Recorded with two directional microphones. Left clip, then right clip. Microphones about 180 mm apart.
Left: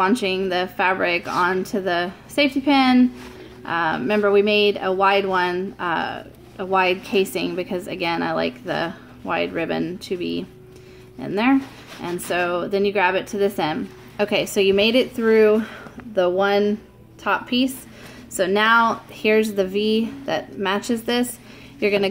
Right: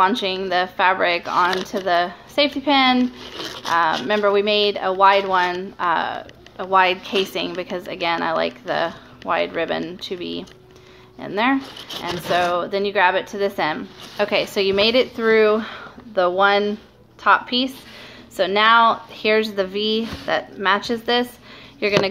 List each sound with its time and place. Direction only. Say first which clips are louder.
0.0 s speech: right 2 dB; 45° left (ahead or behind)
3.6 s speech: right 3 dB; 45° left (ahead or behind)